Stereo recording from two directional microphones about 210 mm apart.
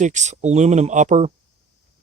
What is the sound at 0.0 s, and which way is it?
Speech, 35° right (ahead or behind).